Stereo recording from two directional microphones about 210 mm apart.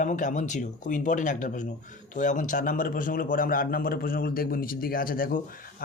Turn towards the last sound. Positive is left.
turn(degrees=40)  # may be behind; listen again after turning